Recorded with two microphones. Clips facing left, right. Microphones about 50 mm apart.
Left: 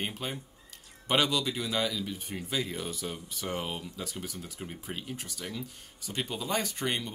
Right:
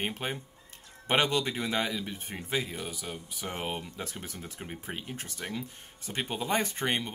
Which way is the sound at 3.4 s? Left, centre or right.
Right.